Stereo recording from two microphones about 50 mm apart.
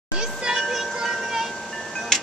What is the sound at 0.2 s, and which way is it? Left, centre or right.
Ice cream truck, centre.